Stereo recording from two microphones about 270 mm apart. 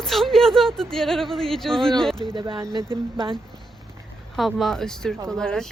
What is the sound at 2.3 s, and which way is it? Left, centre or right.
Speech, centre.